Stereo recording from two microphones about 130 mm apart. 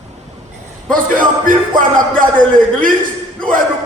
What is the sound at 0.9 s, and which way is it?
Speech, 90° right.